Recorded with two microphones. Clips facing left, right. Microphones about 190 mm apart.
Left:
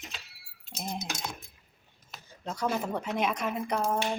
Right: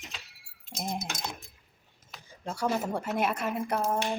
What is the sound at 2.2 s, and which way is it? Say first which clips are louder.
Speech: right 1 dB; 10° right (ahead or behind).